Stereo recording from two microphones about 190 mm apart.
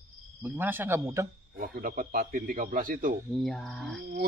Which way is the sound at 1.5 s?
50° right (ahead or behind).